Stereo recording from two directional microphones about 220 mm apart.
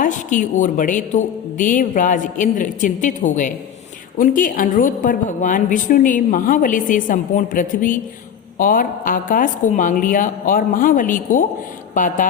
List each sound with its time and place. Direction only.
0.0 s a woman's voice: 35° left (ahead or behind)